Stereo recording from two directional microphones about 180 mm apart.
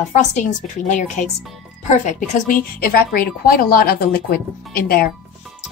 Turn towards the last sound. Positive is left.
turn(degrees=60)  # may be behind; listen again after turning